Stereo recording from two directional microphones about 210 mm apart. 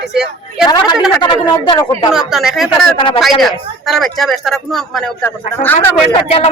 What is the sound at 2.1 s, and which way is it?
Speech, centre (ahead or behind).